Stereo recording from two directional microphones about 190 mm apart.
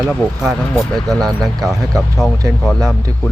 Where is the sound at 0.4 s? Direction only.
Centre (ahead or behind).